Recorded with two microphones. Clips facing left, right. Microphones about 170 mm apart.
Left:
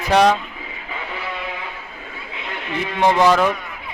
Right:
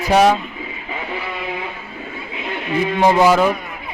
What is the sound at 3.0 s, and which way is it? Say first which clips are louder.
Speech: right 1 dB; 10° right (ahead or behind).